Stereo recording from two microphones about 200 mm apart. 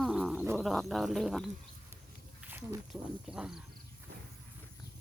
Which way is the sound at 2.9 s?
5° right (ahead or behind).